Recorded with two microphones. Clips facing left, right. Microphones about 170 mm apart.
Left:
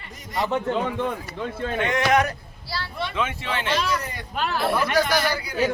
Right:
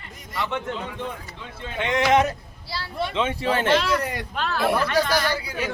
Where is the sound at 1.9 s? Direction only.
20° right (ahead or behind).